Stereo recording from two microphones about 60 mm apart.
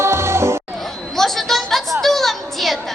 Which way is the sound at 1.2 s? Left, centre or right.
Centre.